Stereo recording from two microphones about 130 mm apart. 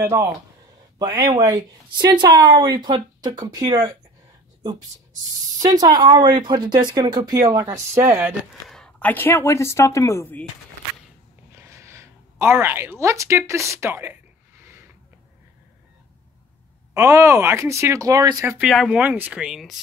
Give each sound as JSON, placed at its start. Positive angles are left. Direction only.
{"t": 0.0, "sound": "speech", "side_deg": -20}
{"t": 0.9, "sound": "speech", "side_deg": -30}
{"t": 5.6, "sound": "speech", "side_deg": -30}
{"t": 7.9, "sound": "speech", "side_deg": -20}
{"t": 8.6, "sound": "speech", "side_deg": 5}
{"t": 11.5, "sound": "a woman's voice", "side_deg": -20}
{"t": 16.9, "sound": "speech", "side_deg": -20}
{"t": 18.6, "sound": "speech", "side_deg": -5}